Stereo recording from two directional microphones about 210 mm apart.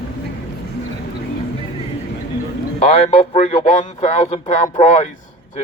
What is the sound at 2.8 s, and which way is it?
Speech, 30° left (ahead or behind).